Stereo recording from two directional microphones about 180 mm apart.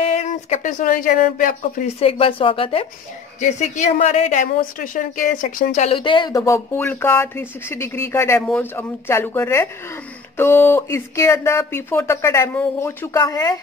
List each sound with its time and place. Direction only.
0.0 s speech: 35° left (ahead or behind)
2.0 s a woman's voice: 30° left (ahead or behind)
3.3 s a woman's voice: 40° left (ahead or behind); by 13.6 s 20° left (ahead or behind)